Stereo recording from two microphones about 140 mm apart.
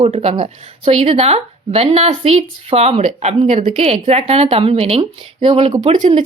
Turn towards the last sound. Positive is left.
turn(degrees=-60)  # may be behind; listen again after turning